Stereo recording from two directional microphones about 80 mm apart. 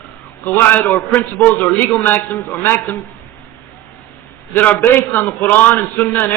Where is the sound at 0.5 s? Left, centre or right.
Left.